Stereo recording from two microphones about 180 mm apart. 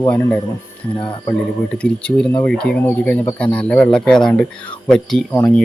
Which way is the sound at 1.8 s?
5° left (ahead or behind).